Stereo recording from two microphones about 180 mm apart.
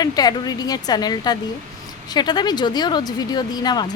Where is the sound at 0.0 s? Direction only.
20° left (ahead or behind).